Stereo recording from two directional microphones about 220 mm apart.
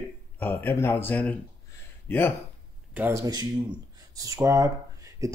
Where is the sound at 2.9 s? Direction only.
10° right (ahead or behind).